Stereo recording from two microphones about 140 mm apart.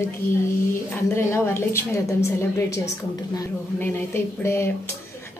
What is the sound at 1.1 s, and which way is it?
A woman's voice, 20° left (ahead or behind).